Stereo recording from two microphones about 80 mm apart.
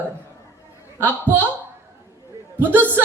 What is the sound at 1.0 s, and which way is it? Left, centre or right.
Speech, right.